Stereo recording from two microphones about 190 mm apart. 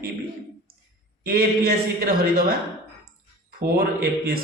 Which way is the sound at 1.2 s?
50° right (ahead or behind).